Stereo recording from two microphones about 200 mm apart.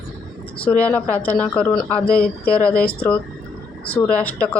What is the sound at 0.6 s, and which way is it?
Speech, 5° left (ahead or behind).